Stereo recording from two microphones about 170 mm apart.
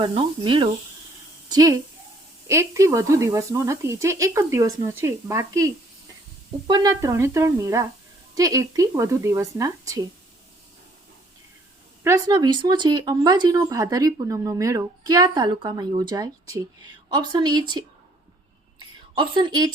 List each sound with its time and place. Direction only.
0.0 s speech: 30° right (ahead or behind)
12.0 s speech: 20° right (ahead or behind)
19.1 s speech: 25° right (ahead or behind)